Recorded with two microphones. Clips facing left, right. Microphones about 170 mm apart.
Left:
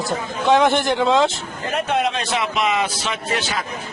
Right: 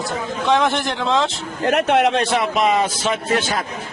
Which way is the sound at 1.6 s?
70° right (ahead or behind).